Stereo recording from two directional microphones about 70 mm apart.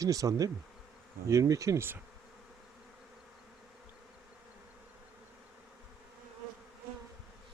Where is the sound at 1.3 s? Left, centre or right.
Right.